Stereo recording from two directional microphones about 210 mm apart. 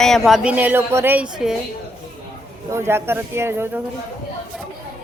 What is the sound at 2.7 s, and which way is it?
A woman's voice, 10° right (ahead or behind).